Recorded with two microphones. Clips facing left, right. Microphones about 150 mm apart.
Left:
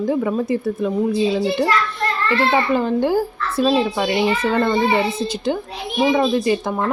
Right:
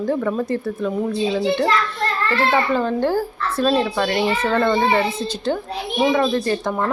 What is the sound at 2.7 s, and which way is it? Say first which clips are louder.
A child's voice: left 2 dB; 15° left (ahead or behind).